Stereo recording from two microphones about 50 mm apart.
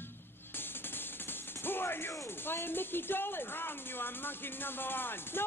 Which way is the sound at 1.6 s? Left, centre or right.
Left.